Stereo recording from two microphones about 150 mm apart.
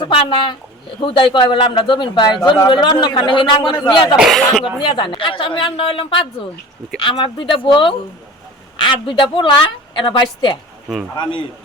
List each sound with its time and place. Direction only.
0.0 s speech: 35° left (ahead or behind)
4.2 s speech: centre (ahead or behind)
4.8 s speech: 30° left (ahead or behind)
9.0 s speech: 35° left (ahead or behind)